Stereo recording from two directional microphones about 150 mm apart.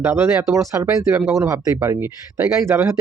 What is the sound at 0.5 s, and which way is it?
Speech, 20° right (ahead or behind).